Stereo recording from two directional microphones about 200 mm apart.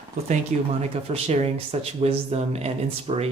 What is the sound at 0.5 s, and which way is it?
Speech, 35° right (ahead or behind).